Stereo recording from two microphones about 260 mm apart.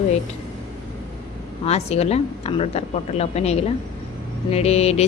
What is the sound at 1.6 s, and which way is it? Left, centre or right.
A woman's voice, left.